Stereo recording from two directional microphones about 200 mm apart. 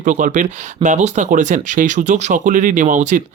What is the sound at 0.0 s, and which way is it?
Speech, 40° right (ahead or behind).